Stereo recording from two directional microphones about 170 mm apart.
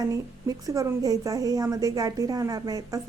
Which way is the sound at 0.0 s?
20° right (ahead or behind).